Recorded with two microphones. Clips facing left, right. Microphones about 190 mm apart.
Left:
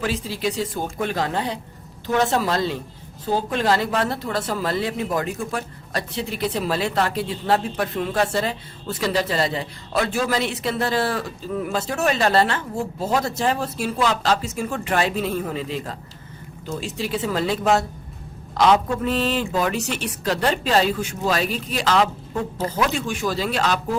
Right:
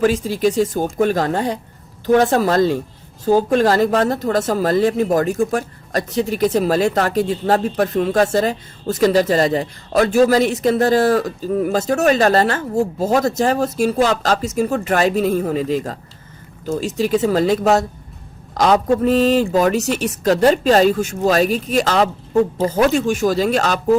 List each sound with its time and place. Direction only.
0.0 s speech: 45° right (ahead or behind)